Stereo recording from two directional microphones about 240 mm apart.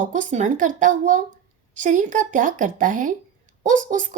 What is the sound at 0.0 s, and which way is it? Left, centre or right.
Speech, right.